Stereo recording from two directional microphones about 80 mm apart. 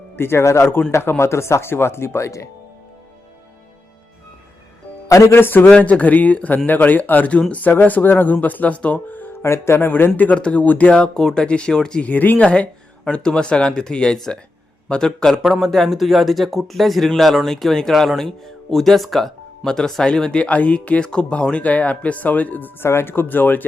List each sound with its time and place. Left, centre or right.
0.2 s speech: left
5.0 s speech: left
5.4 s speech: left
9.4 s speech: left
10.2 s speech: centre